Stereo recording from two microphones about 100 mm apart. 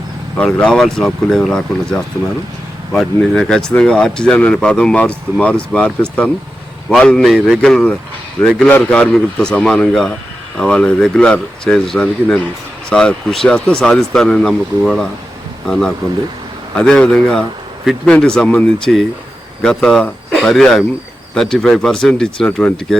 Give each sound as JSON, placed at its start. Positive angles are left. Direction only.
{"t": 0.3, "sound": "speech", "side_deg": 10}